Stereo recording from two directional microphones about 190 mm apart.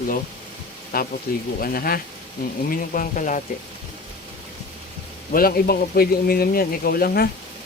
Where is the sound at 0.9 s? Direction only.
50° left (ahead or behind).